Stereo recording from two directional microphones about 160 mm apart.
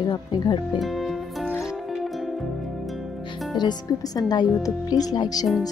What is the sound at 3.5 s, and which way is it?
Speech, 25° left (ahead or behind).